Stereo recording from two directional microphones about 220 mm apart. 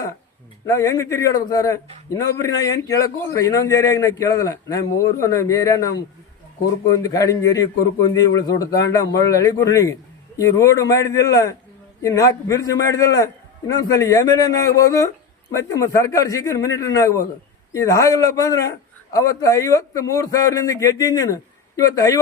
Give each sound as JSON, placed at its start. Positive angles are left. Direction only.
{"t": 0.6, "sound": "speech", "side_deg": 15}